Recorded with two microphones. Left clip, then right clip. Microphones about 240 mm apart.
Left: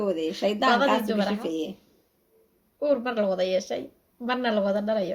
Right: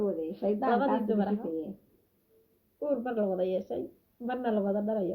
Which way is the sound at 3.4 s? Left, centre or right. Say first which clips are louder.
Left 6 dB; left.